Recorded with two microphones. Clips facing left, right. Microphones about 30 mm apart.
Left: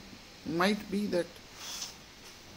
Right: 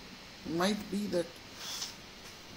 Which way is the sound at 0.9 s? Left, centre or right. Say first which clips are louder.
Left 3 dB; centre.